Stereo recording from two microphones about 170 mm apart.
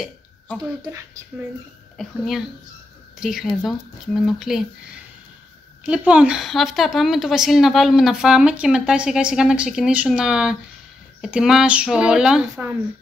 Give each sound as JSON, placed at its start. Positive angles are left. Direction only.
{"t": 0.8, "sound": "speech", "side_deg": -20}
{"t": 2.0, "sound": "speech", "side_deg": 0}